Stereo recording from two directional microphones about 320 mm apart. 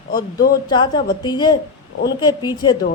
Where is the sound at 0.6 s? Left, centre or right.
Centre.